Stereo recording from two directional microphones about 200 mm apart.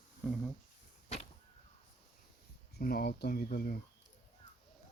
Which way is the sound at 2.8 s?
50° left (ahead or behind).